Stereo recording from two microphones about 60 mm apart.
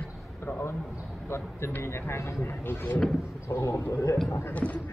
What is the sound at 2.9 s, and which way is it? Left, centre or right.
Speech, centre.